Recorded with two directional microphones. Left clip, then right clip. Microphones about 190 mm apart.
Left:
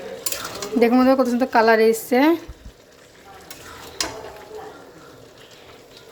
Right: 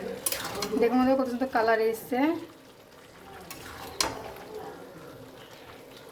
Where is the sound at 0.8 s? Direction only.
40° left (ahead or behind).